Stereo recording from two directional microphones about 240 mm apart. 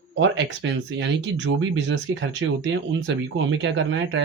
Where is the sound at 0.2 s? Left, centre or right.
Right.